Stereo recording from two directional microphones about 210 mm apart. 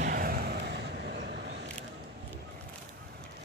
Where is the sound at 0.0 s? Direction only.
45° right (ahead or behind).